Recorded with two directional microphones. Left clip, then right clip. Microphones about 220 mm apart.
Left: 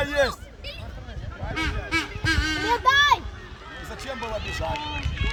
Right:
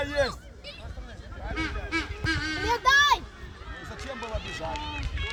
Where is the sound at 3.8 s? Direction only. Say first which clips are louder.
Left 4 dB; 15° left (ahead or behind).